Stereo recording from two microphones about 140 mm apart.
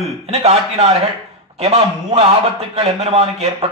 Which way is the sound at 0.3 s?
50° right (ahead or behind).